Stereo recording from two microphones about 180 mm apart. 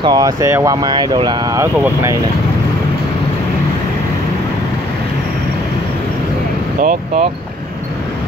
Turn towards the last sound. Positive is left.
turn(degrees=-45)  # may be behind; listen again after turning